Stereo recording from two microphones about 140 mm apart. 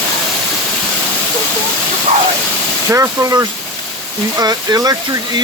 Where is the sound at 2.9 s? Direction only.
20° right (ahead or behind).